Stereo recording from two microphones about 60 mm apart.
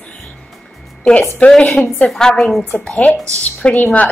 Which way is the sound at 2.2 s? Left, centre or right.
Centre.